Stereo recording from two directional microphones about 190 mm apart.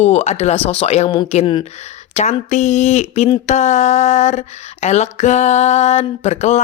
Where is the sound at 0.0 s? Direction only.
35° left (ahead or behind).